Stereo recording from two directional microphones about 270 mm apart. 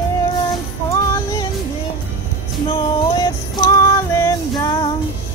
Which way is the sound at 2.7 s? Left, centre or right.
Centre.